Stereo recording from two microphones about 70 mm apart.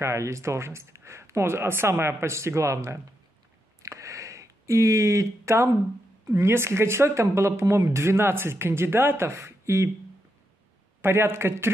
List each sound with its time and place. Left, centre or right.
0.0 s speech: right
3.8 s a sound: right
6.2 s speech: right
11.0 s speech: right